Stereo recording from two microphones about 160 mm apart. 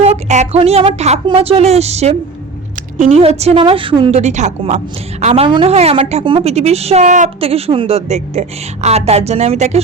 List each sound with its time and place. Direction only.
0.0 s a woman's voice: 45° right (ahead or behind)
4.2 s a woman's voice: 45° right (ahead or behind)
7.3 s a woman's voice: 35° right (ahead or behind)